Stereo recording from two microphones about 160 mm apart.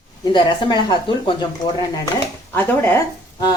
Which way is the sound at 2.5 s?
10° left (ahead or behind).